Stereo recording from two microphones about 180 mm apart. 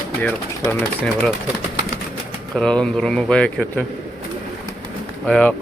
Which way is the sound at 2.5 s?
5° left (ahead or behind).